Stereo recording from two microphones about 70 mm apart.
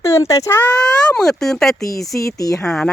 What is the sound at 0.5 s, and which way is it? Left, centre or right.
Speech, left.